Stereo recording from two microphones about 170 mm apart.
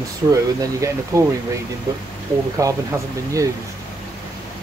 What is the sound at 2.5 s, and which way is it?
Speech, 20° right (ahead or behind).